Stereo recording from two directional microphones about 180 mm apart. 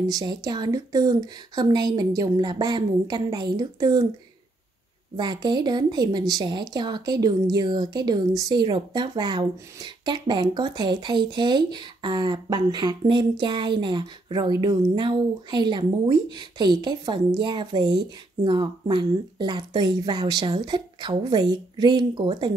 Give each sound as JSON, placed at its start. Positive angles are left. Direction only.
{"t": 0.1, "sound": "speech", "side_deg": -20}
{"t": 5.1, "sound": "speech", "side_deg": -25}